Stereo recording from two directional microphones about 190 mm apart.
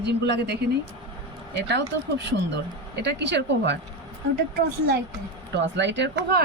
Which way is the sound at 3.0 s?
65° right (ahead or behind).